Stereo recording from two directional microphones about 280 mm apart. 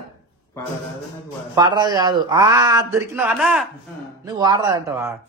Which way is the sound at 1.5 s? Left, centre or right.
Centre.